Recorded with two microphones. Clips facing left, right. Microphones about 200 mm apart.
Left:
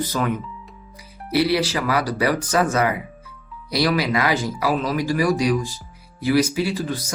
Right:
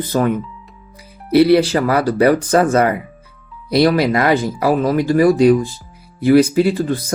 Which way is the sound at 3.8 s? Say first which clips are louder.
Right 7 dB; 55° right (ahead or behind).